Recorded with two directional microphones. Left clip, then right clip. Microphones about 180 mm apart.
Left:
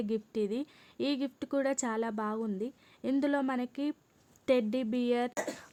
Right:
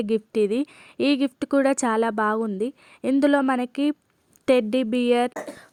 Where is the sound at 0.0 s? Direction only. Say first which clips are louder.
Right 11 dB; 40° right (ahead or behind).